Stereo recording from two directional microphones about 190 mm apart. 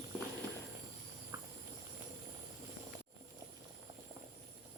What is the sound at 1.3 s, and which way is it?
Hiss, 15° right (ahead or behind).